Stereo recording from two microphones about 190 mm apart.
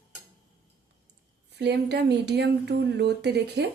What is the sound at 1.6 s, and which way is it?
Speech, 60° right (ahead or behind).